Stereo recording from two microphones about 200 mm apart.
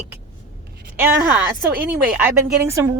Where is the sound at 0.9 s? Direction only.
10° right (ahead or behind).